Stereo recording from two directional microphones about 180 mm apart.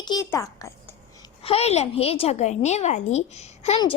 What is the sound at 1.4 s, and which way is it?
A woman's voice, 35° left (ahead or behind).